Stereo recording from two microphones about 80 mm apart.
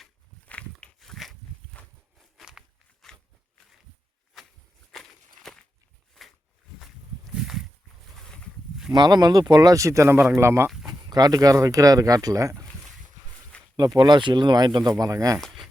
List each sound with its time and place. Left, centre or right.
0.4 s walk: centre
0.9 s a sound: centre
1.7 s a sound: centre
2.4 s walk: centre
4.9 s walk: centre
7.3 s a sound: centre
8.1 s boat: centre
8.9 s speech: right
10.8 s speech: right
13.7 s speech: right